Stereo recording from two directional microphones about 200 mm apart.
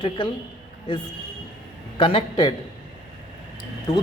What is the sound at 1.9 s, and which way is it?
Speech, 25° left (ahead or behind).